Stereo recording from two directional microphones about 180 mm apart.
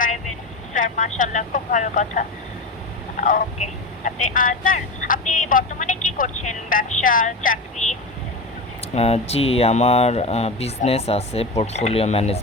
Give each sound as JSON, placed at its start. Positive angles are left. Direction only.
{"t": 0.7, "sound": "speech", "side_deg": 45}
{"t": 9.0, "sound": "speech", "side_deg": 35}